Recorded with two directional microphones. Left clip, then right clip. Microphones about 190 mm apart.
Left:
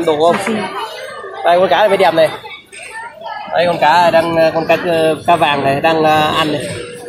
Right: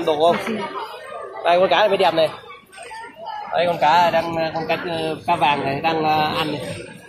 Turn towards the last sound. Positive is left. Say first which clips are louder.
# left 7 dB
turn(degrees=5)  # may be behind; listen again after turning